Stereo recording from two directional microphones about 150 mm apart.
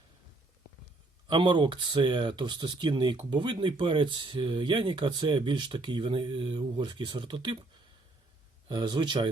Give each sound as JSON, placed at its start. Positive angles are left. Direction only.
{"t": 1.3, "sound": "speech", "side_deg": -30}
{"t": 8.7, "sound": "speech", "side_deg": -30}